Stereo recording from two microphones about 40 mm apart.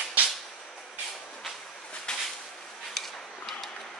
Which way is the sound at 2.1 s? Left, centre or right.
Left.